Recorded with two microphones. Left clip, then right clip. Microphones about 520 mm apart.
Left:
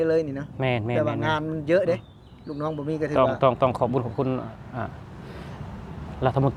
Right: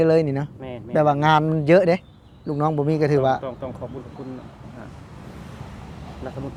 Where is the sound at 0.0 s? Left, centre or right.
Right.